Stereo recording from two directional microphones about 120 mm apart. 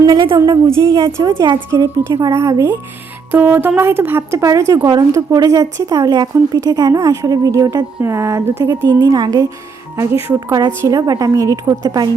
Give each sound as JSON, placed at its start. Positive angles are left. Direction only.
{"t": 0.3, "sound": "a woman's voice", "side_deg": -25}
{"t": 10.2, "sound": "speech", "side_deg": -20}